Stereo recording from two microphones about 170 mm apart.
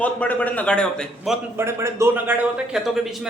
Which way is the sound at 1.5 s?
15° right (ahead or behind).